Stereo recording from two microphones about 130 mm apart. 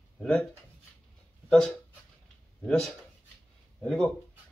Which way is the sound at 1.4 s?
5° left (ahead or behind).